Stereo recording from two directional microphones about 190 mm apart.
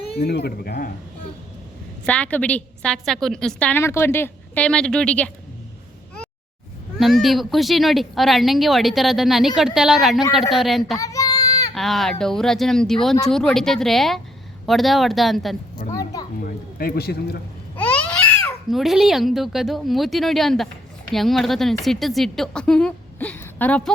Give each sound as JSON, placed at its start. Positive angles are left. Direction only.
{"t": 0.2, "sound": "speech", "side_deg": 60}
{"t": 2.0, "sound": "a woman's voice", "side_deg": 5}
{"t": 7.0, "sound": "speech", "side_deg": 0}
{"t": 10.9, "sound": "child singing", "side_deg": 15}
{"t": 11.7, "sound": "speech", "side_deg": 0}
{"t": 15.9, "sound": "a sound", "side_deg": 20}
{"t": 16.4, "sound": "speech", "side_deg": 50}
{"t": 18.7, "sound": "speech", "side_deg": 0}